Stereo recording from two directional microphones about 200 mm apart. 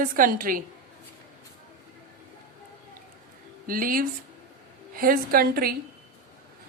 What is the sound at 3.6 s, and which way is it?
A woman's voice, 45° right (ahead or behind).